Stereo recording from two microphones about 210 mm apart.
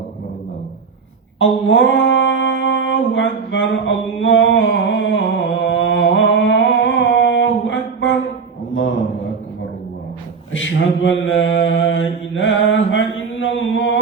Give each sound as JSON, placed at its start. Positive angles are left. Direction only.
{"t": 1.6, "sound": "mantra", "side_deg": 65}
{"t": 8.7, "sound": "a sound", "side_deg": 65}
{"t": 10.5, "sound": "mantra", "side_deg": 65}